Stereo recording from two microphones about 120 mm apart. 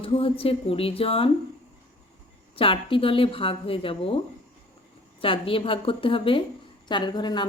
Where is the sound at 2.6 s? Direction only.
50° left (ahead or behind).